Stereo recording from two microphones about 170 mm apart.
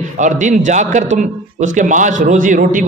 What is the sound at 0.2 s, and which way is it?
A man's voice, 45° right (ahead or behind).